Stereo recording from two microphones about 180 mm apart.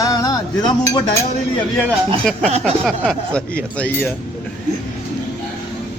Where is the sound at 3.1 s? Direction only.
5° left (ahead or behind).